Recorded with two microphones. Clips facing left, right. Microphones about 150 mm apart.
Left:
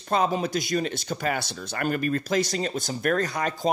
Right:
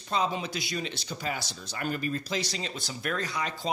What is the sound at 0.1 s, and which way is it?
Speech, 50° left (ahead or behind).